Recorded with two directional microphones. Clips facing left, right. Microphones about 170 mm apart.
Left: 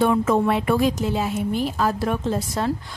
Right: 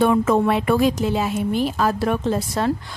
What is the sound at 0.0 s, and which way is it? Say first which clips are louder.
A woman's voice: right 2 dB; 75° right (ahead or behind).